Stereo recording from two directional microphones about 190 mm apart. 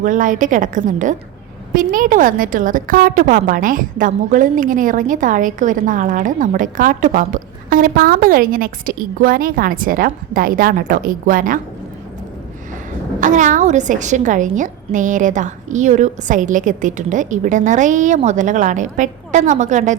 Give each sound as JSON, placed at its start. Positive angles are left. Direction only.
{"t": 0.0, "sound": "a woman's voice", "side_deg": -45}
{"t": 13.1, "sound": "a woman's voice", "side_deg": -40}